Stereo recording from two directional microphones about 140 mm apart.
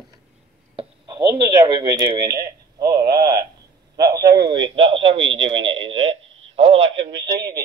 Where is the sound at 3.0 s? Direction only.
90° right.